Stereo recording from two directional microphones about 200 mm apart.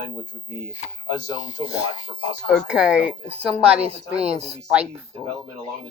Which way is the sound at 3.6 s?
30° right (ahead or behind).